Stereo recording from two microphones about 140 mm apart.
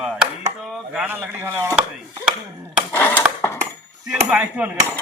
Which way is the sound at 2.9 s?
15° left (ahead or behind).